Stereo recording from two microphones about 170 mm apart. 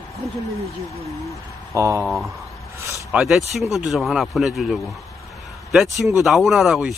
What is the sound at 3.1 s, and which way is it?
Speech, 5° right (ahead or behind).